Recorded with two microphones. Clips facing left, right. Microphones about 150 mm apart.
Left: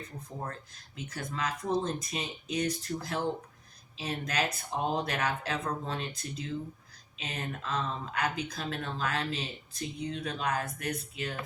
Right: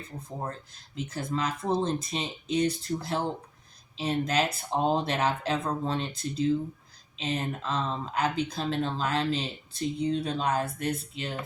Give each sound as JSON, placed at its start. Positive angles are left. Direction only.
{"t": 1.4, "sound": "speech", "side_deg": -25}